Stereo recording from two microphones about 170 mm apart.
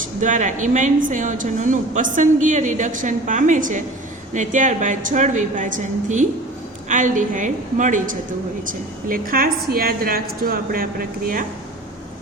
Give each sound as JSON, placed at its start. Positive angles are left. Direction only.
{"t": 0.2, "sound": "a woman's voice", "side_deg": -50}